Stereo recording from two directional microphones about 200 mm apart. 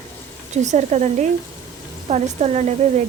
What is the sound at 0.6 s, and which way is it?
Speech, 35° right (ahead or behind).